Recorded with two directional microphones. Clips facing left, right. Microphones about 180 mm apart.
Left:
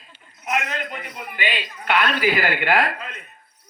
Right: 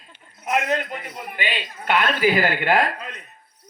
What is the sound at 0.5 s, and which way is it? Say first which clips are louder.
A man's voice: right 4 dB; 45° right (ahead or behind).